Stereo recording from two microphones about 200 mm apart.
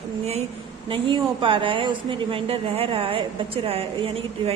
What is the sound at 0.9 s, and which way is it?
Speech, 25° right (ahead or behind).